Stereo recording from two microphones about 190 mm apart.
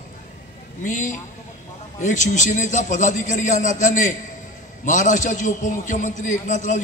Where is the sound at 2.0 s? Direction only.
40° left (ahead or behind).